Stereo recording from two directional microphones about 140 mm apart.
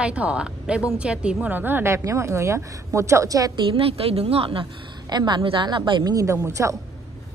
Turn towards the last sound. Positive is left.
turn(degrees=-20)  # may be behind; listen again after turning